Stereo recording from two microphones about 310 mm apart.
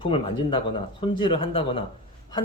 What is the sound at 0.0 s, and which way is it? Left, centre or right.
Speech, centre.